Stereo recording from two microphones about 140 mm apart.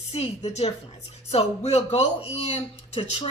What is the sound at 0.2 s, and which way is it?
Speech, 50° left (ahead or behind).